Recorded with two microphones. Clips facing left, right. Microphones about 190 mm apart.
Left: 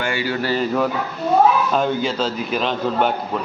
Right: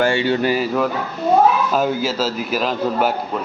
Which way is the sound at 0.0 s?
25° right (ahead or behind).